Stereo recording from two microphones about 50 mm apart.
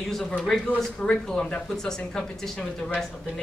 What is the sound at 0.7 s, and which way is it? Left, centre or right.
Speech, centre.